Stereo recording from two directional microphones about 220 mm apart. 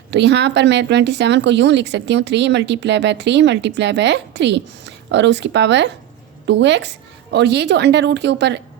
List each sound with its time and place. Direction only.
0.1 s speech: 50° right (ahead or behind)